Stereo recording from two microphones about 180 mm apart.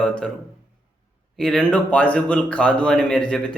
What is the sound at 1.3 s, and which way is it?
A man's voice, centre (ahead or behind).